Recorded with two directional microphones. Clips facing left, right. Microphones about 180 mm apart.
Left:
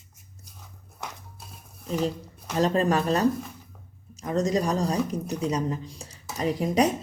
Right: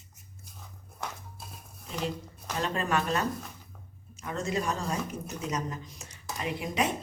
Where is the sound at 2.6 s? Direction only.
35° left (ahead or behind).